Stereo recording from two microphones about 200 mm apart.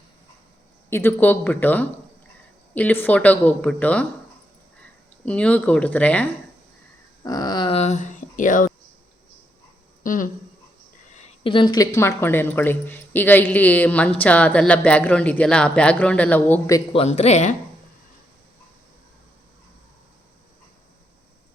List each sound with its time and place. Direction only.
0.9 s speech: 10° left (ahead or behind)
5.2 s speech: 5° left (ahead or behind)
7.3 s dog: 20° left (ahead or behind); by 8.7 s 40° left (ahead or behind)
10.0 s speech: 45° left (ahead or behind)
11.1 s a sound: 30° left (ahead or behind)
11.9 s speech: 10° left (ahead or behind)
16.9 s speech: 30° left (ahead or behind)